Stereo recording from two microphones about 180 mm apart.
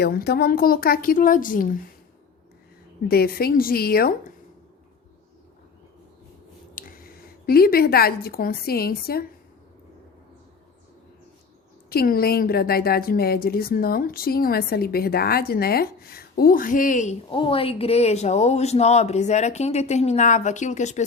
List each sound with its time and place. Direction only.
0.0 s speech: 60° left (ahead or behind)
3.1 s speech: 60° left (ahead or behind)
6.7 s speech: 50° left (ahead or behind)
11.9 s speech: 55° left (ahead or behind)
17.3 s speech: 30° left (ahead or behind)